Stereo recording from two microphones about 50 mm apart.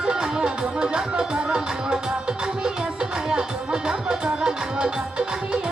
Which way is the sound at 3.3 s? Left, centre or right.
Centre.